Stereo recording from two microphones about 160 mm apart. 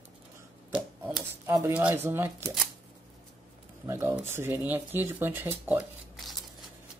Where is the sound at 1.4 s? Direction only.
15° right (ahead or behind).